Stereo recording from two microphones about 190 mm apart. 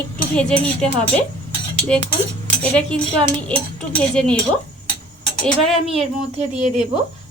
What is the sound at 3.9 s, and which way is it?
Speech, 5° left (ahead or behind).